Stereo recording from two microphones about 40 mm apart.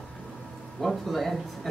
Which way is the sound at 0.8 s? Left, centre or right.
Centre.